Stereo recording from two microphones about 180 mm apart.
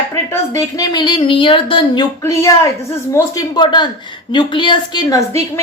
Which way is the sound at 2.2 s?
15° left (ahead or behind).